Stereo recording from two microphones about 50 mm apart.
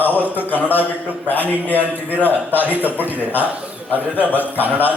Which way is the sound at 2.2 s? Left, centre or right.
Left.